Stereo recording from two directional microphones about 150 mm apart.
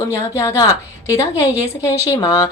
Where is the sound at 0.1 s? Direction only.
20° left (ahead or behind).